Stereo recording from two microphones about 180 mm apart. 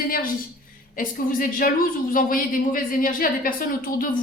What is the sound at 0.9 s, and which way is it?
A woman's voice, 50° left (ahead or behind).